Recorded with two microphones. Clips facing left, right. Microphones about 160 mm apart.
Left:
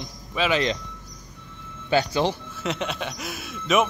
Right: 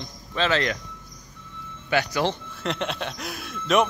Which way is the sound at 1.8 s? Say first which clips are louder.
Left 2 dB; 30° left (ahead or behind).